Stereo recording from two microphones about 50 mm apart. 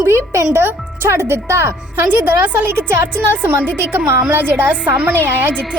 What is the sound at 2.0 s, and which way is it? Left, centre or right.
A woman's voice, right.